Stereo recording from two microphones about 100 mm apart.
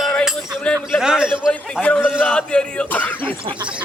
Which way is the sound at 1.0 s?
5° right (ahead or behind).